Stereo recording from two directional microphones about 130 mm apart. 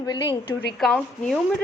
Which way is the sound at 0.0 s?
30° left (ahead or behind).